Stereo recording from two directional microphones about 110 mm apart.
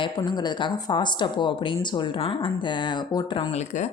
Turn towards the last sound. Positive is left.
turn(degrees=90)